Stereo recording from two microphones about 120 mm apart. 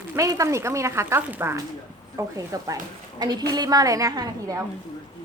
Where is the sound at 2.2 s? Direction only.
25° right (ahead or behind).